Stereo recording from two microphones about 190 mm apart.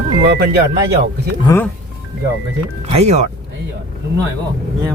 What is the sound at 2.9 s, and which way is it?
Speech, 35° right (ahead or behind).